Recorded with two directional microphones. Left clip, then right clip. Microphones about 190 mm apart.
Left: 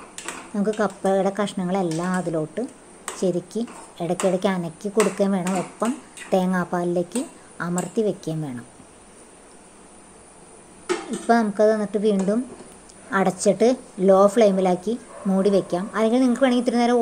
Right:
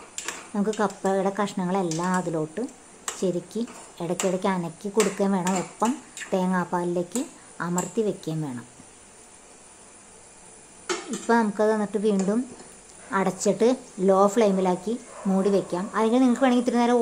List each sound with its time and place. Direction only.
0.6 s a woman's voice: 5° left (ahead or behind)
11.1 s a woman's voice: 10° left (ahead or behind)